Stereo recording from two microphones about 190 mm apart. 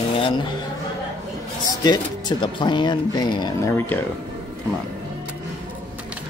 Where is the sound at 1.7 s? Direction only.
20° left (ahead or behind).